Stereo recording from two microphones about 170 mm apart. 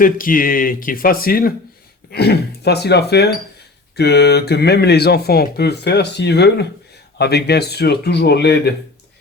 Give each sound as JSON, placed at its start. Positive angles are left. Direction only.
{"t": 0.0, "sound": "speech", "side_deg": 55}
{"t": 2.0, "sound": "speech", "side_deg": 70}